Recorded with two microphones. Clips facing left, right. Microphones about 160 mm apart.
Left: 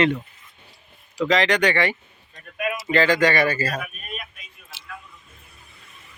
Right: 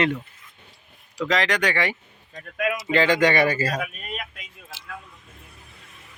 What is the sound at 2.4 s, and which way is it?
Speech, 90° right.